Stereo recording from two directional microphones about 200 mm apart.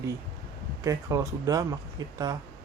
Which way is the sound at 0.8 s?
15° right (ahead or behind).